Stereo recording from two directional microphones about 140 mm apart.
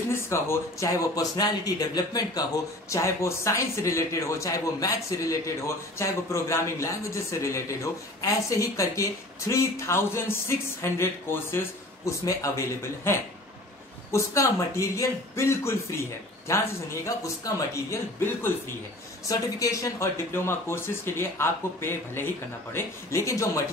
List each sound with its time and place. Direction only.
0.1 s speech: 20° left (ahead or behind)